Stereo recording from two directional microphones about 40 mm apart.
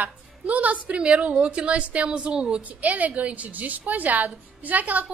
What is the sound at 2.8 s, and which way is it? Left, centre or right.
A woman's voice, right.